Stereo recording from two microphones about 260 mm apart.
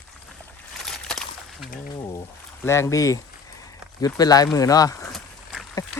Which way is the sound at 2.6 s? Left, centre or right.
Centre.